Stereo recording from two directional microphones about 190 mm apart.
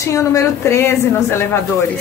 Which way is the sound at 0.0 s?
15° left (ahead or behind).